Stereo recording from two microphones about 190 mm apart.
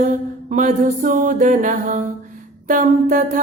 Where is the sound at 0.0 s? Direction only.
40° right (ahead or behind).